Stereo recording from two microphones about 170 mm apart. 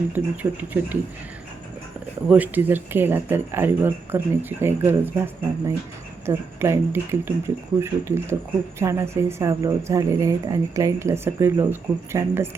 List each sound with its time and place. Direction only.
0.1 s speech: 10° right (ahead or behind)
2.3 s speech: 10° right (ahead or behind)